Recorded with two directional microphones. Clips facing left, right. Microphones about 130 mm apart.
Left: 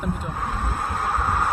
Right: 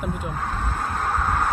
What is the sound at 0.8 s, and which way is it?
Vehicle, 10° left (ahead or behind).